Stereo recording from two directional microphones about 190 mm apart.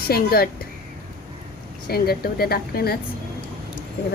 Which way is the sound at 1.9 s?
55° left (ahead or behind).